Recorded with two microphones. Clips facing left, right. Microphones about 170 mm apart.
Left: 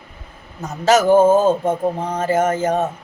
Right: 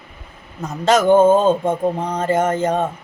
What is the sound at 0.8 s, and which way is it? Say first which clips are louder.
Speech: even; 5° left (ahead or behind).